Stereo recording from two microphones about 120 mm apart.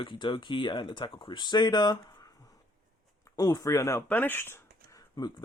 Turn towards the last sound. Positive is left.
turn(degrees=40)  # may be behind; listen again after turning